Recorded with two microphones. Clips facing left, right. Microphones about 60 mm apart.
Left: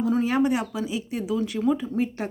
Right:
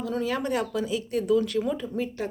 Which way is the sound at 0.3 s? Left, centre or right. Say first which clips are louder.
Left 4 dB; centre.